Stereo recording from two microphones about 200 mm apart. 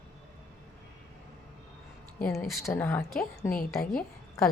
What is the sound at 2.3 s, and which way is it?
A woman's voice, centre (ahead or behind).